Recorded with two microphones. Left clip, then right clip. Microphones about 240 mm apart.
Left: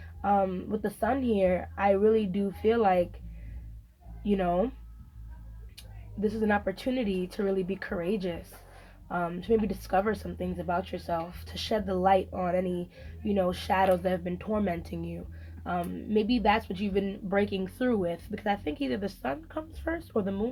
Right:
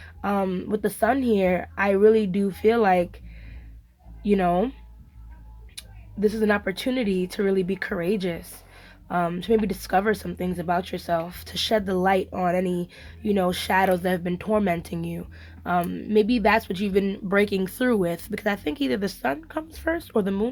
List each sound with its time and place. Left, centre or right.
0.2 s speech: right
4.2 s speech: right
5.7 s speech: right